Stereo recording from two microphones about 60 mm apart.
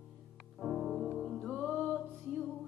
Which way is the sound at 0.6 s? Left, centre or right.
Centre.